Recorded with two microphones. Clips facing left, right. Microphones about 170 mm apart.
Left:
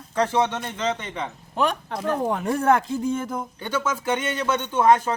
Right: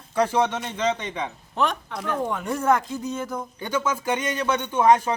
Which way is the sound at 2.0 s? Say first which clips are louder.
Left 3 dB; 35° left (ahead or behind).